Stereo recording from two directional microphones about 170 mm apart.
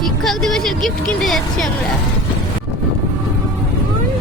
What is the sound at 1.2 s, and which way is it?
Speech, centre (ahead or behind).